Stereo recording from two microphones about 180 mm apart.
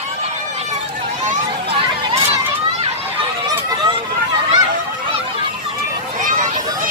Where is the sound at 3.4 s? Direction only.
25° right (ahead or behind).